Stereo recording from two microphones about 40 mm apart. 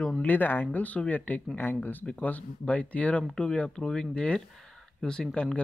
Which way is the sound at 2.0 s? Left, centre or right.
Left.